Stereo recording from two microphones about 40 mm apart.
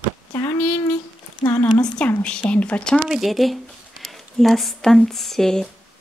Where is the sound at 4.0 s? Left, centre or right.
Centre.